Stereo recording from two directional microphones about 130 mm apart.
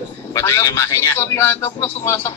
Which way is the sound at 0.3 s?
20° left (ahead or behind).